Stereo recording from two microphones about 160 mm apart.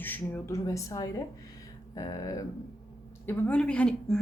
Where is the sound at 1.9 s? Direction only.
20° left (ahead or behind).